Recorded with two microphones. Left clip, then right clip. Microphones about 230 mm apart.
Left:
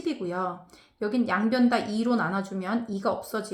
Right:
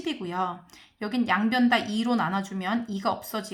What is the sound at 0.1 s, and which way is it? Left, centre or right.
Speech, right.